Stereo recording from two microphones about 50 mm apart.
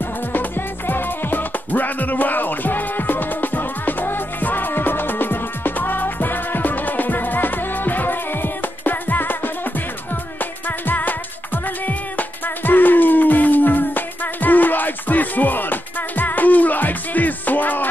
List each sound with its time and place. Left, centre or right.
0.0 s music: left